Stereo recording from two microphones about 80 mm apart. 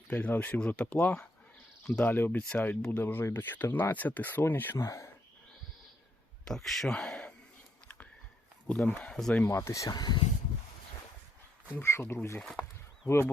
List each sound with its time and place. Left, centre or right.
0.1 s speech: centre
4.8 s speech: left
6.4 s speech: centre
8.7 s speech: centre
9.5 s speech: left
9.9 s speech: left
11.7 s speech: left